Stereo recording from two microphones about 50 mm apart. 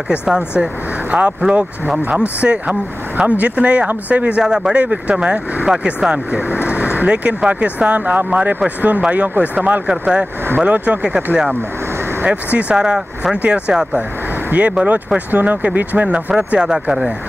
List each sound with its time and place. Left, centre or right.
0.1 s speech: centre
4.4 s speech: centre
6.7 s vehicle: right
7.2 s speech: right
8.0 s speech: right
12.3 s speech: right
16.5 s speech: centre